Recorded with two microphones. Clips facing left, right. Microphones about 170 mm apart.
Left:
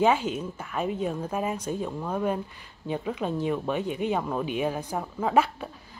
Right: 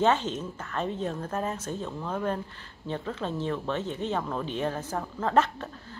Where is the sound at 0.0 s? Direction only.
10° left (ahead or behind).